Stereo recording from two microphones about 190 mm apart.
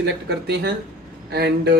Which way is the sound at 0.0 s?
60° right (ahead or behind).